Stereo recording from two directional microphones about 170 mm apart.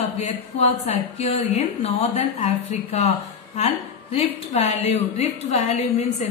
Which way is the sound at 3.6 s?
35° left (ahead or behind).